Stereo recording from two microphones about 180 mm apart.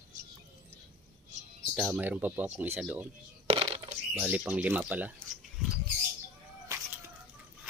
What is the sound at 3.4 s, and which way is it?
Coin, 30° right (ahead or behind).